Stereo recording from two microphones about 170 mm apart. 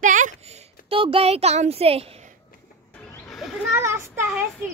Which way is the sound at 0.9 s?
35° right (ahead or behind).